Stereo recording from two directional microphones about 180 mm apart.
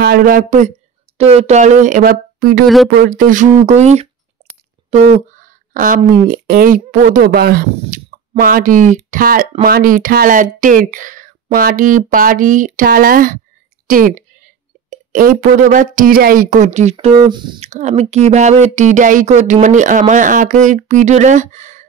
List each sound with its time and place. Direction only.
0.0 s speech: 55° right (ahead or behind)
2.6 s speech: centre (ahead or behind)
3.0 s speech: 50° right (ahead or behind)
7.8 s a sound: 35° right (ahead or behind)
8.4 s speech: 50° right (ahead or behind)
16.9 s speech: 25° right (ahead or behind)
17.6 s speech: 40° right (ahead or behind)